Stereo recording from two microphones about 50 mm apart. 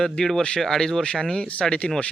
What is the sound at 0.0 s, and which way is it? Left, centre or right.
Speech, centre.